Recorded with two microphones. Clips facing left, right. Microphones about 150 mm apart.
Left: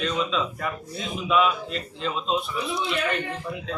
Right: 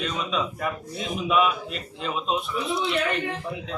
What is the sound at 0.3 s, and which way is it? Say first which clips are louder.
A man's voice: even; 10° right (ahead or behind).